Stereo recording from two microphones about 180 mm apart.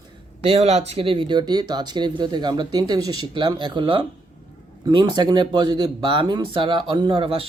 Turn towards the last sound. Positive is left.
turn(degrees=-30)  # may be behind; listen again after turning